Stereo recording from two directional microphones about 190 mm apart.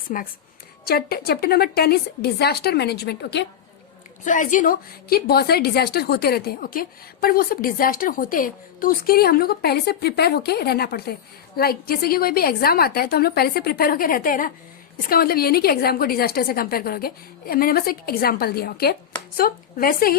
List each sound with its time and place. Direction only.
0.1 s a woman's voice: 45° left (ahead or behind); by 3.4 s 60° left (ahead or behind)
4.2 s a woman's voice: 40° left (ahead or behind)